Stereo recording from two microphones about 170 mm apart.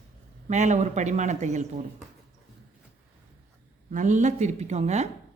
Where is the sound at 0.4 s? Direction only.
45° right (ahead or behind).